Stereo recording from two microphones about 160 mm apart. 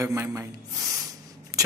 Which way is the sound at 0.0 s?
20° right (ahead or behind).